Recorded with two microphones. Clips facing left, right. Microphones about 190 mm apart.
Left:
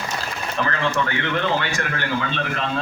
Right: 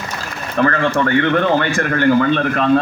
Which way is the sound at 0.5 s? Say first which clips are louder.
Right 8 dB; 55° right (ahead or behind).